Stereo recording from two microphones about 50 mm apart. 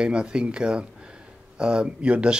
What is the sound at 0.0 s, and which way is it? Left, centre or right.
Speech, centre.